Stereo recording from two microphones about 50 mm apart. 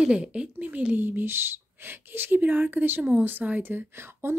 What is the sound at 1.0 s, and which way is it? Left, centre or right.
A woman's voice, right.